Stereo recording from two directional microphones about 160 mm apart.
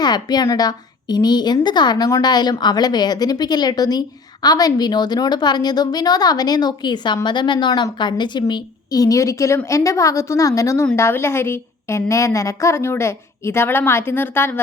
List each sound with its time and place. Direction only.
0.0 s a woman's voice: 25° left (ahead or behind)